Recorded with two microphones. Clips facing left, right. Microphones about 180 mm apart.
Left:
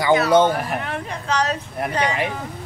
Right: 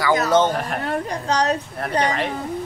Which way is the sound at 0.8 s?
40° right (ahead or behind).